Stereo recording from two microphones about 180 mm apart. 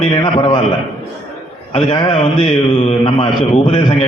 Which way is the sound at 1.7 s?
30° left (ahead or behind).